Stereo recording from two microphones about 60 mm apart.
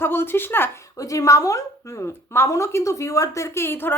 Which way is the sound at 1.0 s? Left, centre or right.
Left.